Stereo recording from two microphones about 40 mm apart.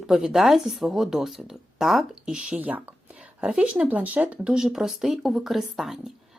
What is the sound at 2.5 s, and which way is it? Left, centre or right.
Speech, right.